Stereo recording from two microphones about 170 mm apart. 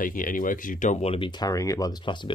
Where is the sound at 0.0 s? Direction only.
55° left (ahead or behind).